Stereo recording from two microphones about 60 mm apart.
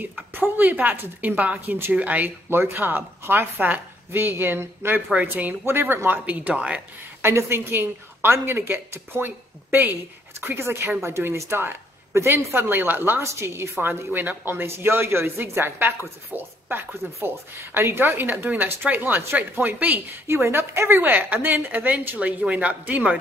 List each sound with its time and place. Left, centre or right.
0.0 s a woman's voice: right
2.5 s a woman's voice: right
5.1 s a woman's voice: right
7.2 s a woman's voice: right
10.4 s a woman's voice: right
13.2 s speech: right
14.1 s a woman's voice: right
20.2 s speech: right
21.0 s a woman's voice: right